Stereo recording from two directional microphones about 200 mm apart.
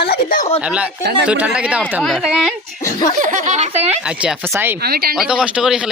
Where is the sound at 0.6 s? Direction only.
5° right (ahead or behind).